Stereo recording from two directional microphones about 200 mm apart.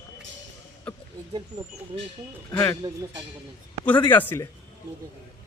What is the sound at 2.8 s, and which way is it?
Speech, 20° right (ahead or behind).